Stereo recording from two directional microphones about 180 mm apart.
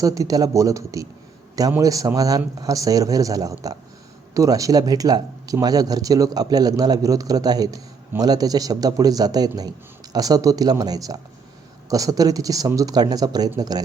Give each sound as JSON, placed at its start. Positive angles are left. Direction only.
{"t": 0.0, "sound": "speech", "side_deg": -20}